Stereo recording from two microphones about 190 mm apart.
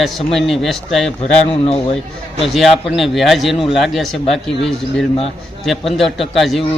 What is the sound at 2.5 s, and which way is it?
Speech, centre (ahead or behind).